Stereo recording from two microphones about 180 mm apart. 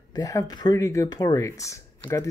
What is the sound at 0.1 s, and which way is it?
Speech, 20° left (ahead or behind).